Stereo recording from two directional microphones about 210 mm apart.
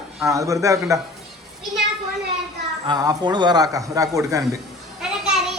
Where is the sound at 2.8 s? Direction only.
20° right (ahead or behind).